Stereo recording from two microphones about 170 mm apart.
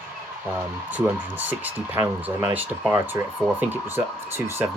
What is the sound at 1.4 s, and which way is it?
Speech, 10° right (ahead or behind).